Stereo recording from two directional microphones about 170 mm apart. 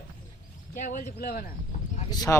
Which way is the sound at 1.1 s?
65° left (ahead or behind).